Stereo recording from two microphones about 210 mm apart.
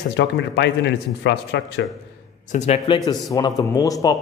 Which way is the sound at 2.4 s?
35° left (ahead or behind).